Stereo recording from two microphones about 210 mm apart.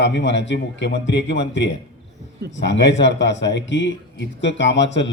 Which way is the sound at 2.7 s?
55° left (ahead or behind).